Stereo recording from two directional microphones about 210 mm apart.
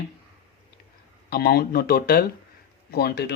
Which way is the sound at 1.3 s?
45° left (ahead or behind).